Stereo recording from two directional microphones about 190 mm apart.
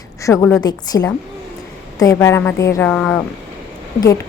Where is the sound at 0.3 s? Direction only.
10° left (ahead or behind).